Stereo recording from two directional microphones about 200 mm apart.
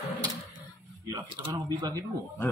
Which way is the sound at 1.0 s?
20° right (ahead or behind).